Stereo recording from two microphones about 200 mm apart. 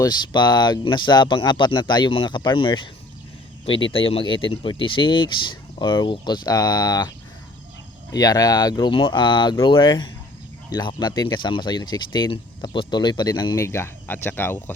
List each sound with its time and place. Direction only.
0.0 s speech: 20° left (ahead or behind)
8.1 s speech: 20° left (ahead or behind)